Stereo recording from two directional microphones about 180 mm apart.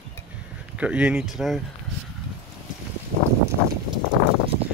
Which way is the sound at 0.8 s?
5° right (ahead or behind).